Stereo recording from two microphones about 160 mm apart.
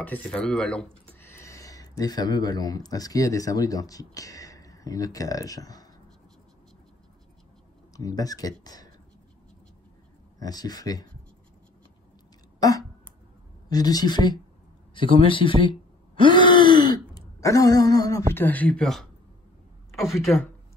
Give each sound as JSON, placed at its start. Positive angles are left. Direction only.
{"t": 0.0, "sound": "speech", "side_deg": 10}
{"t": 1.2, "sound": "speech", "side_deg": 15}
{"t": 7.9, "sound": "speech", "side_deg": 20}
{"t": 10.4, "sound": "speech", "side_deg": 25}
{"t": 12.5, "sound": "a sound", "side_deg": 20}
{"t": 13.7, "sound": "speech", "side_deg": 25}
{"t": 15.0, "sound": "groan", "side_deg": 35}
{"t": 17.1, "sound": "speech", "side_deg": 20}